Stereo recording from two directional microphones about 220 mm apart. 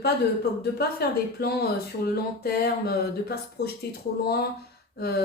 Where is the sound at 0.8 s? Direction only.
45° left (ahead or behind).